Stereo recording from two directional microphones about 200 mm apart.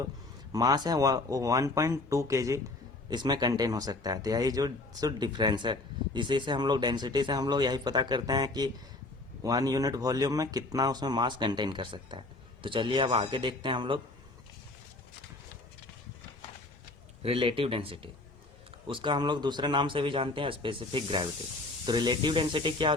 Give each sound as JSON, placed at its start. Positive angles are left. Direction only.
{"t": 0.5, "sound": "speech", "side_deg": -20}
{"t": 17.2, "sound": "speech", "side_deg": -25}